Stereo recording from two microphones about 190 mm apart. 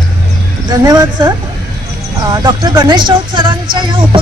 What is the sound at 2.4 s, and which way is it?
Speech, 25° right (ahead or behind).